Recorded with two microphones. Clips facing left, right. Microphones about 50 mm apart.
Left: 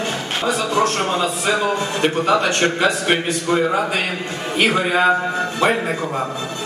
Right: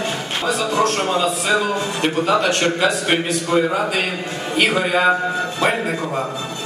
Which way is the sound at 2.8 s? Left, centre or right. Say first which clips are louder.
Even; centre.